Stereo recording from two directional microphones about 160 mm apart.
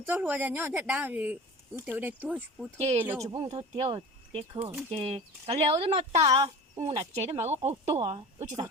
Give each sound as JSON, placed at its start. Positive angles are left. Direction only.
{"t": 0.0, "sound": "speech", "side_deg": -10}
{"t": 3.2, "sound": "speech", "side_deg": -35}
{"t": 4.6, "sound": "speech", "side_deg": -15}
{"t": 4.9, "sound": "speech", "side_deg": -40}
{"t": 6.2, "sound": "speech", "side_deg": -25}
{"t": 6.7, "sound": "speech", "side_deg": -40}